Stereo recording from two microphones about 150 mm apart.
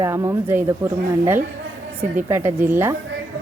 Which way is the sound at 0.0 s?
20° right (ahead or behind).